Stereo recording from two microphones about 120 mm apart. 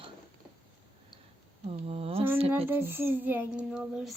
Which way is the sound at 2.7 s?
20° right (ahead or behind).